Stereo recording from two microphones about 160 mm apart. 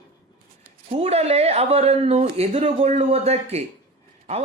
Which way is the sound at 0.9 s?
40° right (ahead or behind).